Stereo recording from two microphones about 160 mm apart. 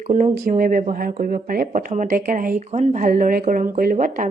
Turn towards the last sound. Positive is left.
turn(degrees=-55)  # may be behind; listen again after turning